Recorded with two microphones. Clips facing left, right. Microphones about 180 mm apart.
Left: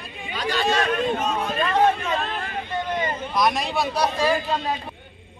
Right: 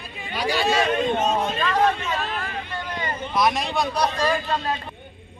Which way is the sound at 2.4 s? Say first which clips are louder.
Left 3 dB; 20° left (ahead or behind).